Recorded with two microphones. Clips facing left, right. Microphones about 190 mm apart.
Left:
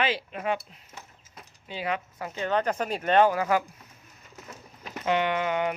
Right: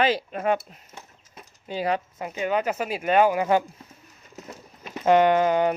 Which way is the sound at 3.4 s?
25° right (ahead or behind).